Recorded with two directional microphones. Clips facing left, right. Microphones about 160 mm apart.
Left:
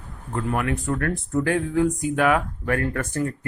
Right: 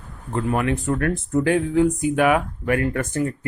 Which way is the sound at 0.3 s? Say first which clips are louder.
Right 3 dB; 25° right (ahead or behind).